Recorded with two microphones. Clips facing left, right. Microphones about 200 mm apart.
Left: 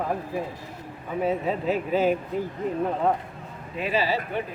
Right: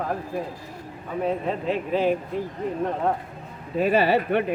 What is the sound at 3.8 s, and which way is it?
Speech, 55° right (ahead or behind).